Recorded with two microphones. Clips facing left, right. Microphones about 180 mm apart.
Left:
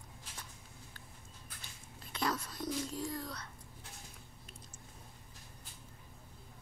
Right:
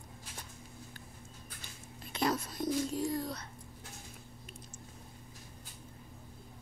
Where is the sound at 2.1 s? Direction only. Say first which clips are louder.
Right 4 dB; 20° right (ahead or behind).